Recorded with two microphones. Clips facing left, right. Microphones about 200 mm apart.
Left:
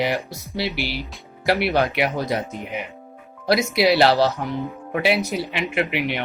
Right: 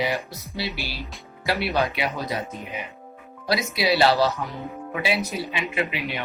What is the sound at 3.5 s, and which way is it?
Speech, 60° left (ahead or behind).